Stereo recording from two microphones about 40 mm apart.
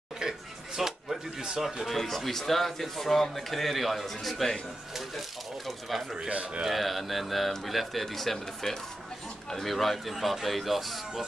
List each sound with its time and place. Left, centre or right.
0.2 s a sound: centre
1.6 s a man's voice: centre
2.0 s a man's voice: centre
5.7 s a man's voice: centre
6.2 s a man's voice: right
6.6 s a man's voice: centre